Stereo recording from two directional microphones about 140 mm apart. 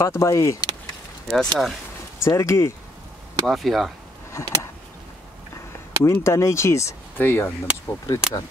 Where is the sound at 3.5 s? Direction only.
Centre (ahead or behind).